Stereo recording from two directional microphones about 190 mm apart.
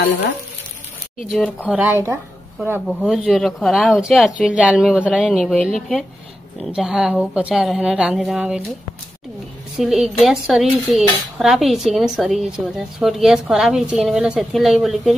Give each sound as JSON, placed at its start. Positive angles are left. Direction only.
{"t": 0.0, "sound": "frying", "side_deg": 70}
{"t": 1.2, "sound": "speech", "side_deg": -5}
{"t": 2.6, "sound": "cutlery", "side_deg": -5}
{"t": 9.8, "sound": "cutlery", "side_deg": 0}